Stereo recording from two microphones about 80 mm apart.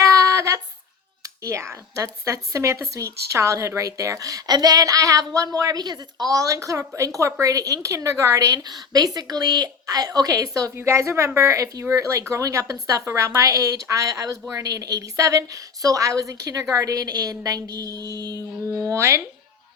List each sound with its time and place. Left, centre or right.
0.0 s a sound: right
1.5 s speech: right
10.8 s speech: right